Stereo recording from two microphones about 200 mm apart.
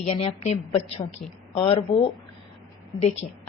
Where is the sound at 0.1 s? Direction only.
30° left (ahead or behind).